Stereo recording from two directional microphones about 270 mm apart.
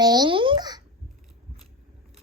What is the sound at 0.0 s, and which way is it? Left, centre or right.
Babbling, centre.